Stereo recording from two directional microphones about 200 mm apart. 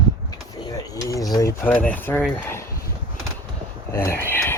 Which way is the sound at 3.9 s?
10° left (ahead or behind).